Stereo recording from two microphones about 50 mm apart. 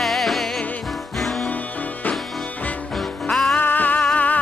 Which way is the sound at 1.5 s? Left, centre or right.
Left.